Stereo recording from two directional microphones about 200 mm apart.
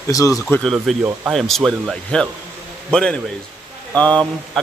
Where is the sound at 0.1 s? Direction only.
15° left (ahead or behind).